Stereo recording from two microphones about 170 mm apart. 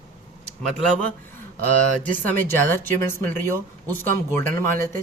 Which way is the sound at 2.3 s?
10° left (ahead or behind).